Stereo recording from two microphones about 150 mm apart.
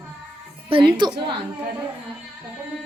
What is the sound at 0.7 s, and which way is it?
Speech, 30° right (ahead or behind).